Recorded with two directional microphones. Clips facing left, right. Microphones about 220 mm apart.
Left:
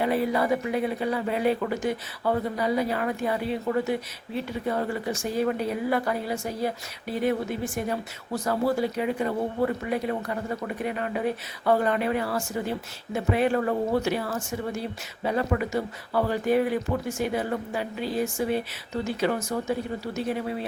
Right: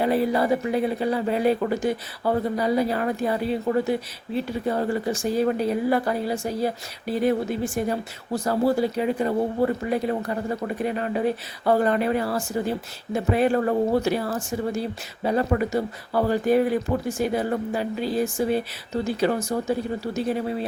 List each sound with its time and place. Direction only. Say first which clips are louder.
0.0 s speech: right 3 dB; 35° right (ahead or behind)